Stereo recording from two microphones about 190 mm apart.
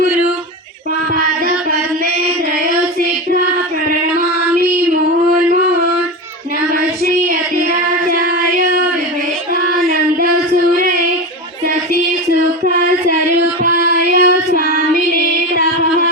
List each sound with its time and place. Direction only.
6.7 s child singing: 50° right (ahead or behind)
12.3 s a sound: 45° right (ahead or behind)
14.1 s child singing: 40° right (ahead or behind)
15.1 s music: 50° right (ahead or behind)